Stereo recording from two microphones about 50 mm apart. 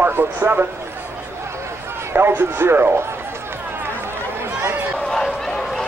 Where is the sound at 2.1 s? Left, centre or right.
Right.